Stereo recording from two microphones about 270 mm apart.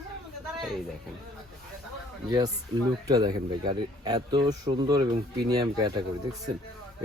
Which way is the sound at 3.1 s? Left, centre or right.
Centre.